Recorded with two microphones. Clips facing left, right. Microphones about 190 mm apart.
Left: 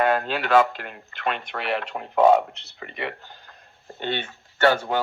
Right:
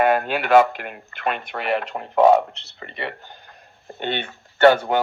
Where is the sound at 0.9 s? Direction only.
50° right (ahead or behind).